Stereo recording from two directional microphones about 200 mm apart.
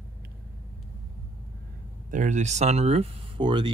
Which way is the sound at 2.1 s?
35° right (ahead or behind).